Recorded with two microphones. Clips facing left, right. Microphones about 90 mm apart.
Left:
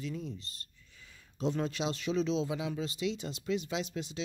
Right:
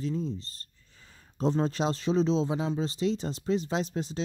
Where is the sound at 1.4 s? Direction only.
35° right (ahead or behind).